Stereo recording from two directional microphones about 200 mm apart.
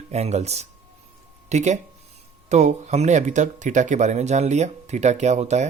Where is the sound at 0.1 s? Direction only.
35° right (ahead or behind).